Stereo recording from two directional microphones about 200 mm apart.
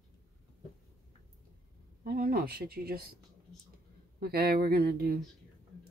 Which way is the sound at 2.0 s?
50° right (ahead or behind).